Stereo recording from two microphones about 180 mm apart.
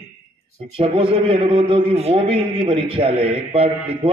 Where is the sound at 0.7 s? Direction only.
30° right (ahead or behind).